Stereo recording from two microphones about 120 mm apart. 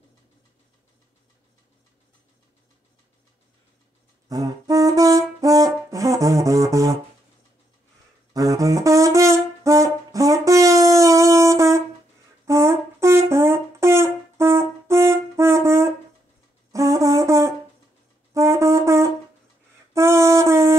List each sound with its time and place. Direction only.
4.3 s wind instrument: 30° right (ahead or behind)
8.3 s wind instrument: 30° right (ahead or behind)
12.4 s brass instrument: 25° right (ahead or behind)
19.9 s a sound: 25° right (ahead or behind)